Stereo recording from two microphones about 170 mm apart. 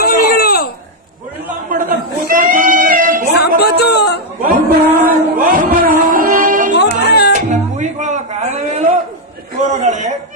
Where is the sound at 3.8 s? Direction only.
75° left (ahead or behind).